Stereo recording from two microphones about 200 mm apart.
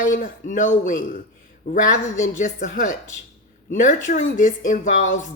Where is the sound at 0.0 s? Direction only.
40° left (ahead or behind).